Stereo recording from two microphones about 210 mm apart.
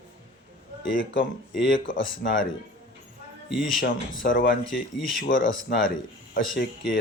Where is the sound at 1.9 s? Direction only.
65° left (ahead or behind).